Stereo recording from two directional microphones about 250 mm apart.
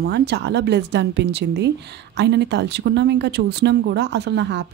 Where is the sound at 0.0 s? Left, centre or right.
Right.